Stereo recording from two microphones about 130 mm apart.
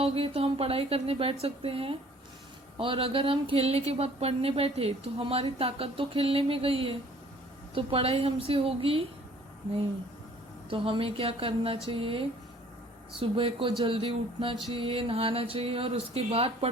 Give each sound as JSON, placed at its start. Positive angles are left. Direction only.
{"t": 0.0, "sound": "a woman's voice", "side_deg": -50}
{"t": 10.7, "sound": "a woman's voice", "side_deg": -45}